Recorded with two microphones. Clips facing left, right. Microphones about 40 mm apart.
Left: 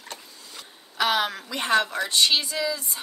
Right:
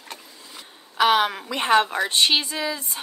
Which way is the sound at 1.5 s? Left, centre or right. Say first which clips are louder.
Right 3 dB; right.